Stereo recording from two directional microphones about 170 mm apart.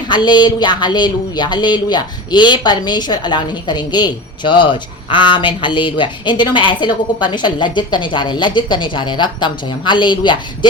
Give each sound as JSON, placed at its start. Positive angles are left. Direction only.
{"t": 0.1, "sound": "speech", "side_deg": 25}